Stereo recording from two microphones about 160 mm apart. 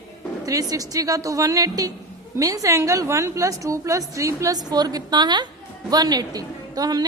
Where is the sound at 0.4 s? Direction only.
20° right (ahead or behind).